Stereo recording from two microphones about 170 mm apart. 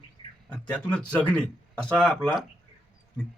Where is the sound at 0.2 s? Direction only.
25° left (ahead or behind).